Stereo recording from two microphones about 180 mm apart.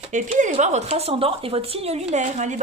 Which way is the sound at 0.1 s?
40° right (ahead or behind).